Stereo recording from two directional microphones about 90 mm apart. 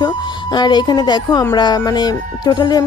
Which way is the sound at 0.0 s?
55° left (ahead or behind).